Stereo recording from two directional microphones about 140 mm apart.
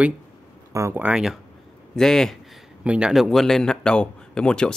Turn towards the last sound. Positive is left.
turn(degrees=5)  # may be behind; listen again after turning